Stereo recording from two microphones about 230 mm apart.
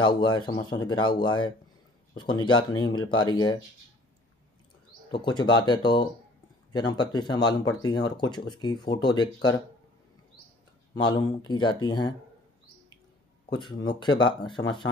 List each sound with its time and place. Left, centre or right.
0.0 s speech: centre
5.1 s speech: centre
11.0 s speech: centre
13.5 s speech: centre